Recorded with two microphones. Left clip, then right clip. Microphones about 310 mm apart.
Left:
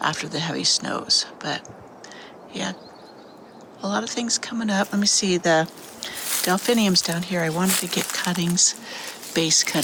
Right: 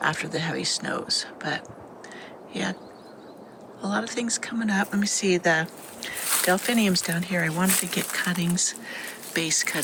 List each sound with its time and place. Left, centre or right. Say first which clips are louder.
0.0 s speech: left 1 dB; centre
3.8 s speech: left 2 dB; centre